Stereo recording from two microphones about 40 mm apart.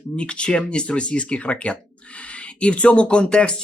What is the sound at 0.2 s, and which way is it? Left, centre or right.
Speech, left.